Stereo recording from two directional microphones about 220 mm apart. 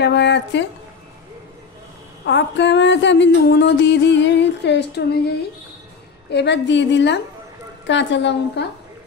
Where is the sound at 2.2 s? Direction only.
55° left (ahead or behind).